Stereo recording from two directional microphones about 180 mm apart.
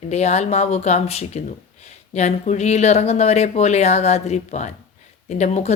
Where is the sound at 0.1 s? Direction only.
40° left (ahead or behind).